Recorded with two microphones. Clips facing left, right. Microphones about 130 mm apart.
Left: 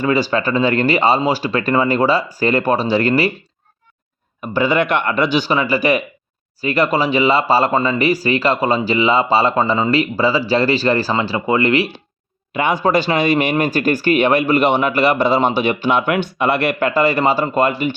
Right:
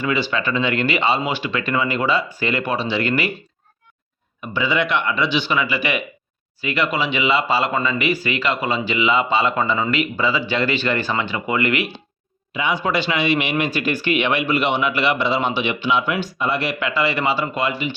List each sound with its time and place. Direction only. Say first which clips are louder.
0.0 s speech: left 5 dB; 40° left (ahead or behind)
4.4 s speech: left 5 dB; 45° left (ahead or behind)
12.5 s speech: left 5 dB; 50° left (ahead or behind)